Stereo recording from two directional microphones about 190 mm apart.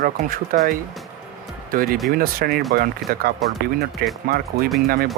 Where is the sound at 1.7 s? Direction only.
50° right (ahead or behind).